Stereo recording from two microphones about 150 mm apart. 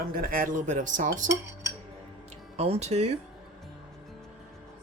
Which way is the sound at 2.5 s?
40° right (ahead or behind).